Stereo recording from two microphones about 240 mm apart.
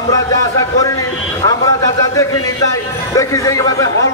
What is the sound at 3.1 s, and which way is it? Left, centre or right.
Speech, centre.